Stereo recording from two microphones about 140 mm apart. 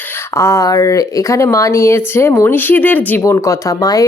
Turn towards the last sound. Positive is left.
turn(degrees=25)  # may be behind; listen again after turning